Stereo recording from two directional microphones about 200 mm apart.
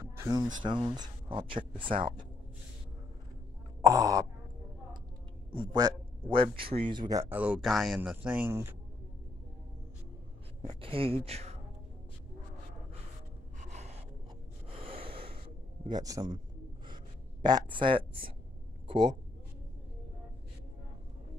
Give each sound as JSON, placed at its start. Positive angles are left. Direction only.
{"t": 0.0, "sound": "speech", "side_deg": -15}
{"t": 1.9, "sound": "speech", "side_deg": -45}
{"t": 3.8, "sound": "a man's voice", "side_deg": -15}
{"t": 5.5, "sound": "a man's voice", "side_deg": -25}
{"t": 10.6, "sound": "speech", "side_deg": -25}
{"t": 13.6, "sound": "gasp", "side_deg": -35}
{"t": 14.7, "sound": "snort", "side_deg": -30}
{"t": 15.4, "sound": "a sound", "side_deg": -20}
{"t": 16.8, "sound": "gasp", "side_deg": -20}
{"t": 18.9, "sound": "a man's voice", "side_deg": -20}